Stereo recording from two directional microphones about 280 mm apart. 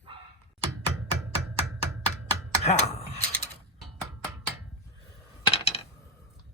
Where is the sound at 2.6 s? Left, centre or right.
Left.